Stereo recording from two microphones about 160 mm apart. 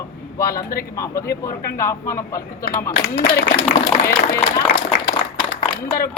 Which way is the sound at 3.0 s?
85° left.